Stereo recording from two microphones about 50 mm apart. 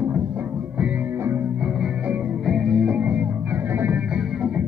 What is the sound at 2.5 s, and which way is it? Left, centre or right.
Music, centre.